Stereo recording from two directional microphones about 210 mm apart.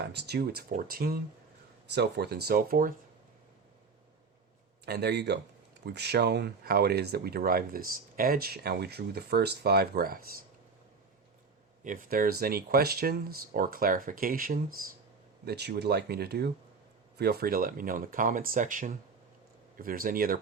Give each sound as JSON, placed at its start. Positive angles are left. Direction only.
{"t": 0.0, "sound": "speech", "side_deg": -50}
{"t": 4.9, "sound": "speech", "side_deg": -50}
{"t": 11.8, "sound": "speech", "side_deg": -40}